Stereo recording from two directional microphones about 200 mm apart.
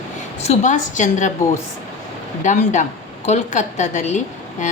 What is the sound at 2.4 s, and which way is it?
A woman's voice, 40° left (ahead or behind).